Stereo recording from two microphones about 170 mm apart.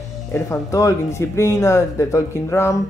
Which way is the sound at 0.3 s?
15° left (ahead or behind).